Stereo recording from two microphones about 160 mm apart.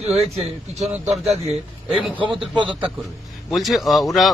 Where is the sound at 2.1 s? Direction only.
30° right (ahead or behind).